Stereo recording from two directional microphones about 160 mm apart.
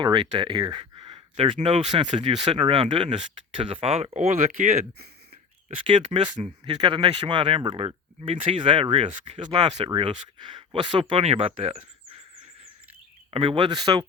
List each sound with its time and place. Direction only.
0.0 s speech: 30° right (ahead or behind); by 4.9 s 45° right (ahead or behind)
5.7 s speech: 35° right (ahead or behind)
13.3 s speech: 35° right (ahead or behind)